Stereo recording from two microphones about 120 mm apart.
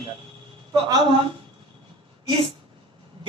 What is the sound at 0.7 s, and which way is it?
Speech, 30° right (ahead or behind).